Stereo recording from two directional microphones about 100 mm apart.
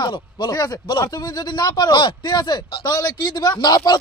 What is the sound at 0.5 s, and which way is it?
A man's voice, 40° left (ahead or behind).